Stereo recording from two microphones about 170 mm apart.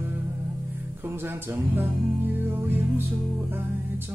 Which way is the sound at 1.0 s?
10° right (ahead or behind).